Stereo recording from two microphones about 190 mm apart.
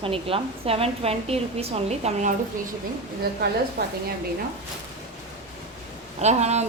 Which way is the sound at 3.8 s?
60° right (ahead or behind).